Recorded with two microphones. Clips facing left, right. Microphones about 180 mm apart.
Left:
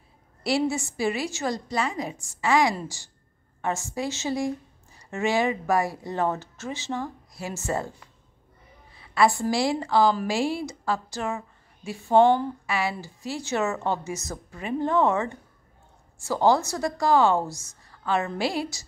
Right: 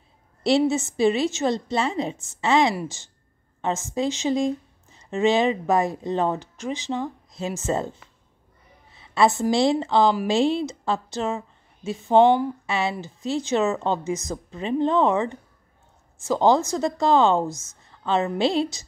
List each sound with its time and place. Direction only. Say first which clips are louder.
0.4 s a woman's voice: right 5 dB; 25° right (ahead or behind)